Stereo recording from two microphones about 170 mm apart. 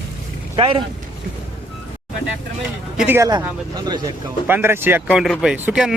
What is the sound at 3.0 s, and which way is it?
Speech, 15° right (ahead or behind).